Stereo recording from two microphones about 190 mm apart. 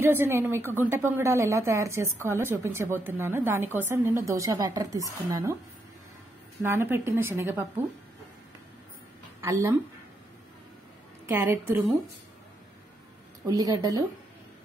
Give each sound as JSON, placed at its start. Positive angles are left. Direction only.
{"t": 0.0, "sound": "a woman's voice", "side_deg": -15}
{"t": 6.6, "sound": "a woman's voice", "side_deg": -10}
{"t": 9.4, "sound": "a woman's voice", "side_deg": -15}
{"t": 11.2, "sound": "a woman's voice", "side_deg": -15}
{"t": 13.5, "sound": "speech", "side_deg": -20}